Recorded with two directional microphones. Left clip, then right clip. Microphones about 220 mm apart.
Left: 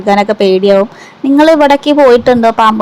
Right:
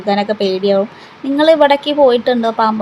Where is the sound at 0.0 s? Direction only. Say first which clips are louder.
Left 6 dB; 25° left (ahead or behind).